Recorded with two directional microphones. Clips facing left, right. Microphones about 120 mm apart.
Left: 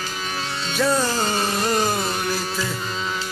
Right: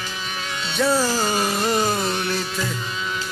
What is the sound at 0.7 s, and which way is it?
Music, 5° right (ahead or behind).